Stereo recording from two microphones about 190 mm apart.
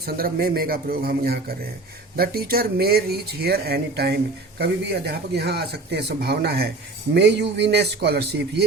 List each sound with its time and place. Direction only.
0.0 s a man's voice: 50° right (ahead or behind)